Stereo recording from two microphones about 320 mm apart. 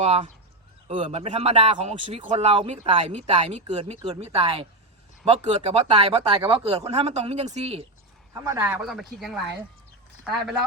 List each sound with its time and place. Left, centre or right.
0.0 s speech: centre